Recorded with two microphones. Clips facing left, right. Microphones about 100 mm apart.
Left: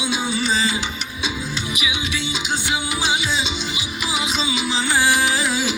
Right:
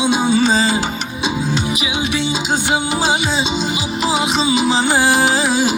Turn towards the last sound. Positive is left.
turn(degrees=-30)  # may be behind; listen again after turning